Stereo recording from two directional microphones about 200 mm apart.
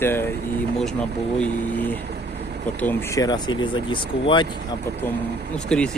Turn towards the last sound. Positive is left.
turn(degrees=5)  # may be behind; listen again after turning